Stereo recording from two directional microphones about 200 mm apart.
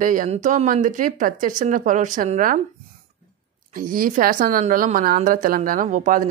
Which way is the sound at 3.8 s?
45° right (ahead or behind).